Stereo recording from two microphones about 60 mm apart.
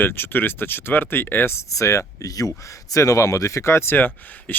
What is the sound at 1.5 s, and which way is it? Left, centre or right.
Speech, left.